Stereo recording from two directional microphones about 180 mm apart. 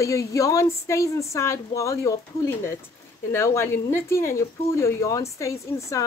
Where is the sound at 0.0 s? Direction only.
15° left (ahead or behind).